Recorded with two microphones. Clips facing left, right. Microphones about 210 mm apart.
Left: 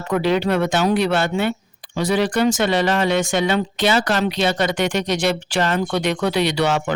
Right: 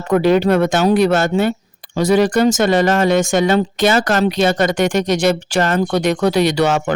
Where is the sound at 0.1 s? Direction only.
45° right (ahead or behind).